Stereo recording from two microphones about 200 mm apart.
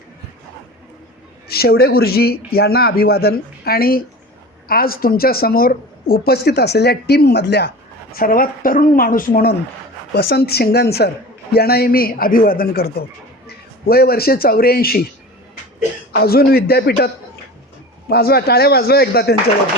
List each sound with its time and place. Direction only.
1.5 s a woman's voice: 50° left (ahead or behind)
8.1 s a woman's voice: 45° left (ahead or behind)
16.1 s a woman's voice: 50° left (ahead or behind)
18.1 s a woman's voice: 50° left (ahead or behind)